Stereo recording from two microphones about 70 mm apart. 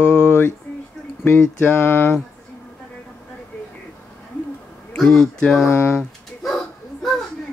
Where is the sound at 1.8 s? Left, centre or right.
Left.